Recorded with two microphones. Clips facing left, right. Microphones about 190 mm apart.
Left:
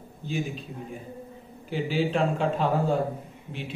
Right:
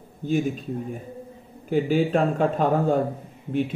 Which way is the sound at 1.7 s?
50° right (ahead or behind).